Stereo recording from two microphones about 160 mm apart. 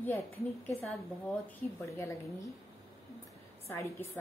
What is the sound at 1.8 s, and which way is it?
Speech, 20° left (ahead or behind).